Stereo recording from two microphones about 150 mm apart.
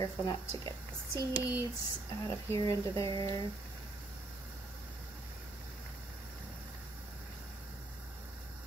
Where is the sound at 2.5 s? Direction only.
20° left (ahead or behind).